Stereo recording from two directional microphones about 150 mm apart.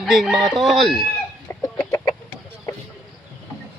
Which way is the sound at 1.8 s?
30° left (ahead or behind).